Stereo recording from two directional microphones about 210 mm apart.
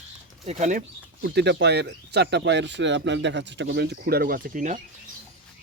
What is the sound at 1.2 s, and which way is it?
Speech, 55° right (ahead or behind).